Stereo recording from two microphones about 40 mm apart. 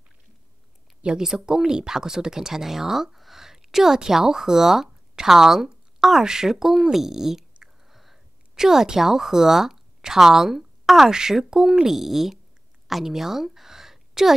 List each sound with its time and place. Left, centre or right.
1.0 s a woman's voice: right
1.4 s speech: centre
7.6 s a sound: centre
11.1 s a woman's voice: centre